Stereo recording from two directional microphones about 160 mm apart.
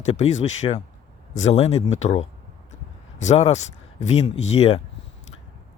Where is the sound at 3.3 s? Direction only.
45° left (ahead or behind).